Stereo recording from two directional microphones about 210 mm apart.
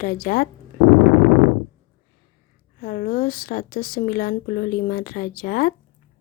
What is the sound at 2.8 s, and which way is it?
Speech, 40° left (ahead or behind).